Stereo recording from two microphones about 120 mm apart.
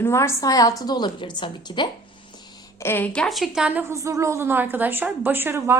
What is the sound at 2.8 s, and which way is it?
A woman's voice, 15° left (ahead or behind).